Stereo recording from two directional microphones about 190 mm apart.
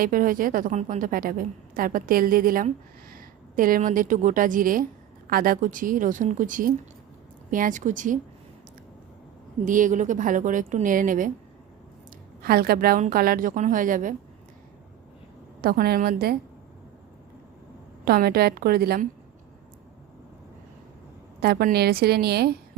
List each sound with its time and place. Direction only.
0.0 s a woman's voice: 45° right (ahead or behind)
9.6 s a woman's voice: 45° right (ahead or behind)
12.4 s a woman's voice: 55° right (ahead or behind)
15.6 s a woman's voice: 55° right (ahead or behind)
18.0 s a woman's voice: 55° right (ahead or behind)
21.4 s a woman's voice: 55° right (ahead or behind)